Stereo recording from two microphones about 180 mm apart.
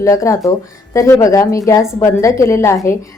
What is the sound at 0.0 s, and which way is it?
Speech, 15° left (ahead or behind).